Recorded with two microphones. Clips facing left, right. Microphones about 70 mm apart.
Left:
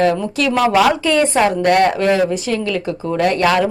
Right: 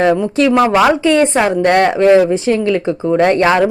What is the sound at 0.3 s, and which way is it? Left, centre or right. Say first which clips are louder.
Speech: right 3 dB; right.